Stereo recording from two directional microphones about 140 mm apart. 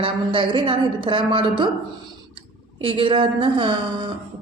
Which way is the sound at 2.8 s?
40° right (ahead or behind).